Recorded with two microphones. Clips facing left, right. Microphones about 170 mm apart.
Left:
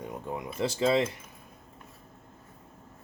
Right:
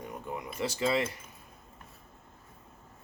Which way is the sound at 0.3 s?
25° left (ahead or behind).